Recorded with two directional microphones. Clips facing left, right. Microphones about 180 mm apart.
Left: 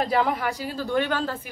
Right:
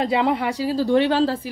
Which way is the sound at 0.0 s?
25° right (ahead or behind).